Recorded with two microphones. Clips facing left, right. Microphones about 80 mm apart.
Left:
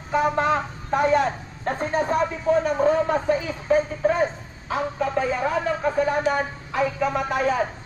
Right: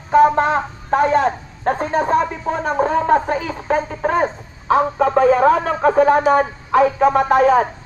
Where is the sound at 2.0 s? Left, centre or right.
Right.